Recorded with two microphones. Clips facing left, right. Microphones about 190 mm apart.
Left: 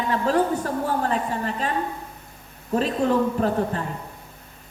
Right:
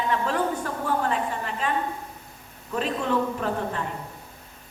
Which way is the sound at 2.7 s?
40° left (ahead or behind).